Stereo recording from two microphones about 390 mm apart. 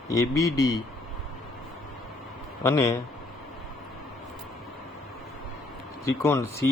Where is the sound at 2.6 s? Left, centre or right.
Centre.